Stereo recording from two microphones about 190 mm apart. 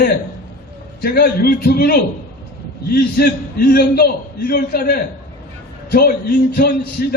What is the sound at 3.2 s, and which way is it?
A man's voice, 55° left (ahead or behind).